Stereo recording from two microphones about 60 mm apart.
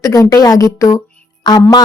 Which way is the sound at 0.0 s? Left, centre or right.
Left.